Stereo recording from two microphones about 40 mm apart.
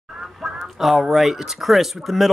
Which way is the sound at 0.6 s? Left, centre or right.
Centre.